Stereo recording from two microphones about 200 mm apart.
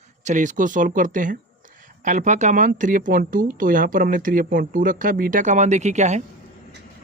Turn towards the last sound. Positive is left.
turn(degrees=-35)  # may be behind; listen again after turning